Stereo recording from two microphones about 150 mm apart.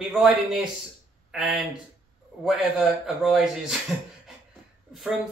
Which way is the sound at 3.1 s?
Centre (ahead or behind).